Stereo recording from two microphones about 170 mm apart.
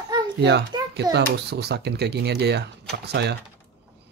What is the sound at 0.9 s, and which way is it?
Speech, 75° right (ahead or behind).